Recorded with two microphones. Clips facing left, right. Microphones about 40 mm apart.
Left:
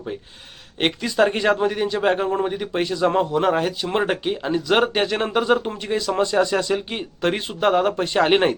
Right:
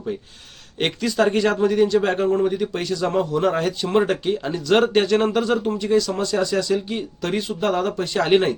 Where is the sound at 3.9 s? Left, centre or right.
Left.